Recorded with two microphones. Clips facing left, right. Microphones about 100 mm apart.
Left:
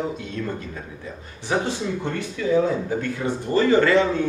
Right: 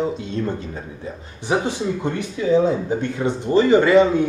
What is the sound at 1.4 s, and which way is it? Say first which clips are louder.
Speech: right 3 dB; 15° right (ahead or behind).